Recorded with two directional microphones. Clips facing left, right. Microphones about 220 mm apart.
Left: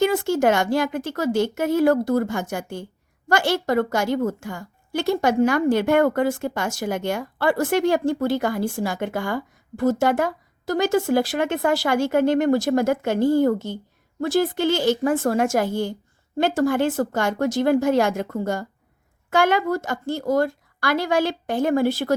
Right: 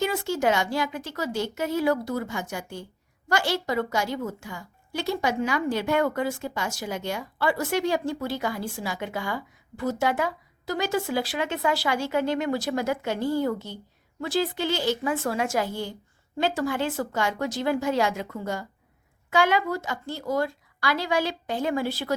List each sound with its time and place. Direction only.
0.0 s a woman's voice: 50° left (ahead or behind)